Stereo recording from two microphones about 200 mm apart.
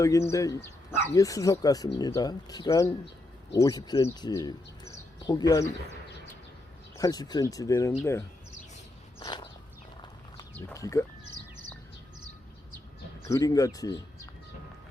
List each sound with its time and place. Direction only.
0.0 s speech: 15° left (ahead or behind)
6.9 s speech: 15° left (ahead or behind)
9.2 s a sound: 20° left (ahead or behind)
10.7 s speech: 15° left (ahead or behind)
13.2 s speech: 15° left (ahead or behind)